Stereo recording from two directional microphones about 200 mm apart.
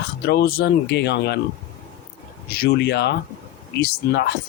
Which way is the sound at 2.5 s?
55° left (ahead or behind).